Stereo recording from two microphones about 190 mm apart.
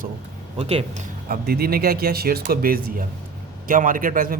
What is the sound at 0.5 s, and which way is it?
Speech, 30° right (ahead or behind).